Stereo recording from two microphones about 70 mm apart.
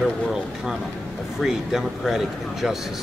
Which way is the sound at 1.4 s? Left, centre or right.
Centre.